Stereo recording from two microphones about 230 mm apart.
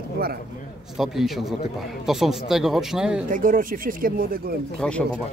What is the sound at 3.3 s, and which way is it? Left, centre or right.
Speech, right.